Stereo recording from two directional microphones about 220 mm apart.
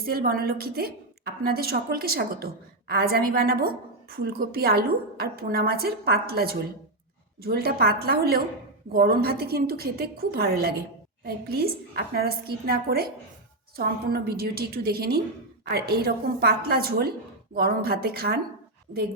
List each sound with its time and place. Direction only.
0.0 s a woman's voice: 45° right (ahead or behind)